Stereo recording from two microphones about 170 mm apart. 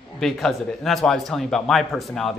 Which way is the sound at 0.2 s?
Centre (ahead or behind).